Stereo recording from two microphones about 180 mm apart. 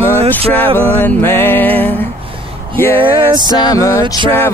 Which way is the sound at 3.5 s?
20° left (ahead or behind).